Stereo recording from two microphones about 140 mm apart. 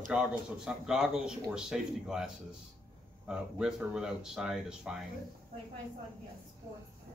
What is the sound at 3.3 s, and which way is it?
Speech, 5° right (ahead or behind).